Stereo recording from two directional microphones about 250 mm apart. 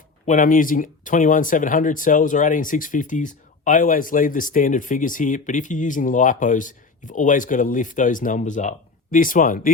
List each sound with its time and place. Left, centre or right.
0.3 s speech: left